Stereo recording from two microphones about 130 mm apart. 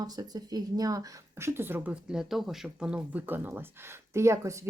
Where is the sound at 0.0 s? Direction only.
30° right (ahead or behind).